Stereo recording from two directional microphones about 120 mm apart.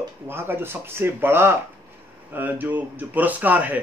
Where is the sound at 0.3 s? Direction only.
20° right (ahead or behind).